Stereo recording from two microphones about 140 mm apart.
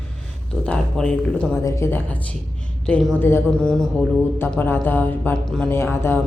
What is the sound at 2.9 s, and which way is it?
Speech, 5° left (ahead or behind).